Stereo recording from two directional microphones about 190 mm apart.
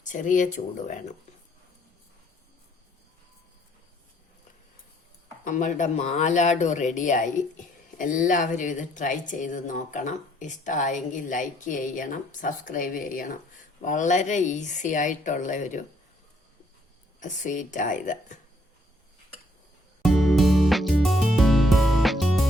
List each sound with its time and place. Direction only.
0.0 s speech: 40° left (ahead or behind)
5.5 s speech: 40° left (ahead or behind)
17.2 s speech: 40° left (ahead or behind)
20.0 s music: centre (ahead or behind)